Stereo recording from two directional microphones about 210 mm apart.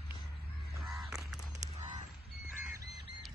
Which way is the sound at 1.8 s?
35° right (ahead or behind).